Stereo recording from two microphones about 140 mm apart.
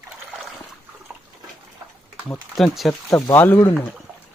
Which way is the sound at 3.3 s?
15° left (ahead or behind).